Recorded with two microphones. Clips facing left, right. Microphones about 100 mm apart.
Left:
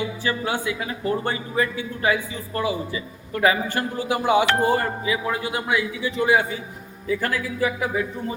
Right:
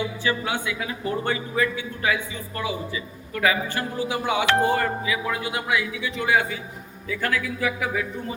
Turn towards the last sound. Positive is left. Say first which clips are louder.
# left 2 dB
turn(degrees=30)  # may be behind; listen again after turning